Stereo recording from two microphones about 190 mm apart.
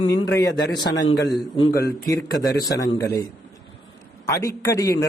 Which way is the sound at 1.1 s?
60° left (ahead or behind).